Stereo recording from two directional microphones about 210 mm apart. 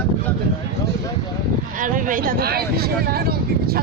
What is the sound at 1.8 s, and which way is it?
Speech, 40° right (ahead or behind).